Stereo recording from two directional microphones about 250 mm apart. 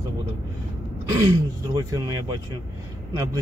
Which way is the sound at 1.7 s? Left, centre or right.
Centre.